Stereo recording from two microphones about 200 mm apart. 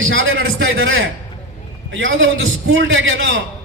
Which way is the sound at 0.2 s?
75° right (ahead or behind).